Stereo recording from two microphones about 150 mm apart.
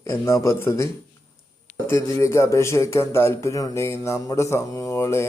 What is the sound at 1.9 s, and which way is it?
Speech, 20° left (ahead or behind).